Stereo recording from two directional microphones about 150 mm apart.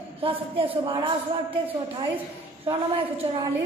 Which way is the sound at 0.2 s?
40° right (ahead or behind).